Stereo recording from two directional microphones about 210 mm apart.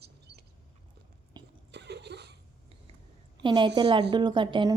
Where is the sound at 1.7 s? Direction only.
55° right (ahead or behind).